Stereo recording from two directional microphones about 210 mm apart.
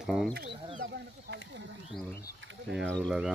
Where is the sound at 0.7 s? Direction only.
40° right (ahead or behind).